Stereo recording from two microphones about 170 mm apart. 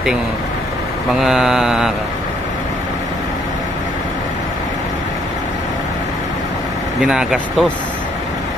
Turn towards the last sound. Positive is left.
turn(degrees=0)  # may be behind; listen again after turning